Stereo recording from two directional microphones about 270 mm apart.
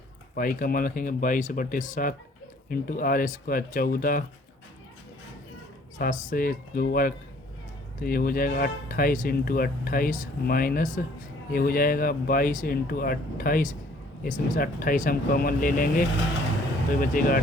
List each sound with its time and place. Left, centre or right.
0.3 s speech: left
6.0 s speech: left